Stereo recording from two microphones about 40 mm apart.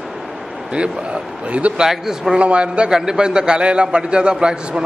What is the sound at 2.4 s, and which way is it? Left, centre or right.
A man's voice, right.